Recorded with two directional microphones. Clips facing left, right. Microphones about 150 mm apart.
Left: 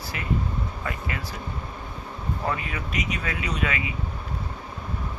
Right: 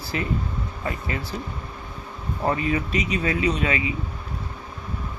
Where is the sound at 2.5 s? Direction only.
30° right (ahead or behind).